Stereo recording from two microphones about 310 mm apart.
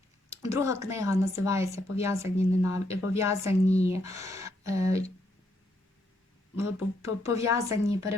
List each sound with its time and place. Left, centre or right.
0.3 s speech: centre
6.7 s speech: centre